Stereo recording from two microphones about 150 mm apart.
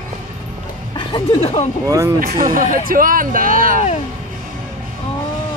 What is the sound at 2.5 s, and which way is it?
Speech, 65° right (ahead or behind).